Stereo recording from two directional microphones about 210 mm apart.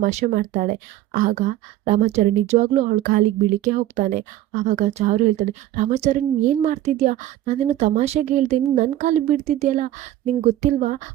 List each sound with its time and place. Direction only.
0.0 s a woman's voice: 35° right (ahead or behind)